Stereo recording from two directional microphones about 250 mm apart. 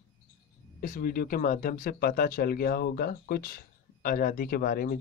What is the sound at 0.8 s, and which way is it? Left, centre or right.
Speech, left.